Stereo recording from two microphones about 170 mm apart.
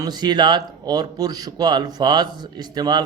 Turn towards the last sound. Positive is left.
turn(degrees=-25)  # may be behind; listen again after turning